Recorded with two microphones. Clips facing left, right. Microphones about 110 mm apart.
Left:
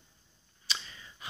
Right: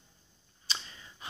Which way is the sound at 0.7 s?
35° right (ahead or behind).